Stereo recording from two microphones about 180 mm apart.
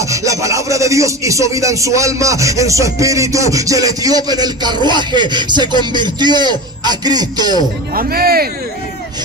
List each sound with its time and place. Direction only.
0.0 s speech: 15° right (ahead or behind)
7.9 s speech: 55° right (ahead or behind)